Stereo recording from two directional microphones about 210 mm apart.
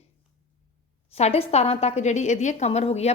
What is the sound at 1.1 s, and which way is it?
A woman's voice, 30° left (ahead or behind).